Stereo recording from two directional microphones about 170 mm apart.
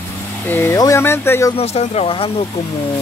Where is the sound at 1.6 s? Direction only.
35° left (ahead or behind).